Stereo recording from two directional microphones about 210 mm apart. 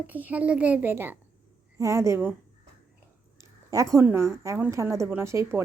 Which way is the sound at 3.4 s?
15° right (ahead or behind).